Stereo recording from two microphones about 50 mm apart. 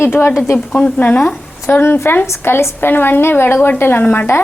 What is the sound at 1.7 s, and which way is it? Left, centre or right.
Speech, left.